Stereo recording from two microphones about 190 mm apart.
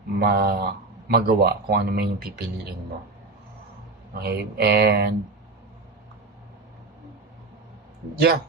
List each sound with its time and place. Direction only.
0.2 s speech: 55° right (ahead or behind)
4.1 s speech: 55° right (ahead or behind)